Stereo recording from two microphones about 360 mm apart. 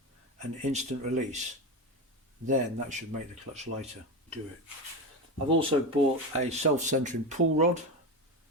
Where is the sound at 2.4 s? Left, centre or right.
Centre.